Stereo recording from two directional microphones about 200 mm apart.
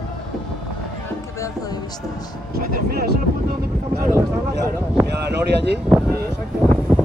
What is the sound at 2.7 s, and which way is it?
Speech, 50° right (ahead or behind).